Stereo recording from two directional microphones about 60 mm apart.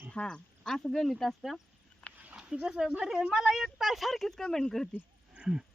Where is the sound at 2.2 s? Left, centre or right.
Centre.